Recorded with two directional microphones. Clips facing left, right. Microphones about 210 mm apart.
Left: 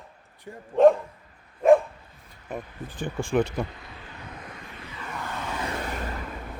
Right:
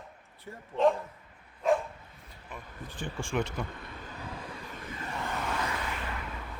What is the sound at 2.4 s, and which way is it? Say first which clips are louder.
Speech: left 9 dB; 40° left (ahead or behind).